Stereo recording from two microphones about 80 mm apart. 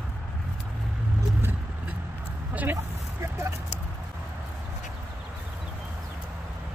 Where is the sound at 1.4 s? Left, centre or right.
Right.